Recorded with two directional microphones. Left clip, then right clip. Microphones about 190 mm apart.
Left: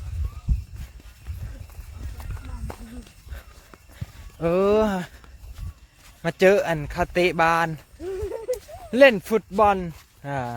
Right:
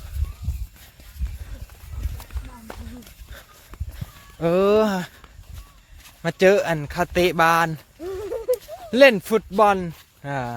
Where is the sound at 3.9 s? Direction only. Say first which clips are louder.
Right 2 dB; 10° right (ahead or behind).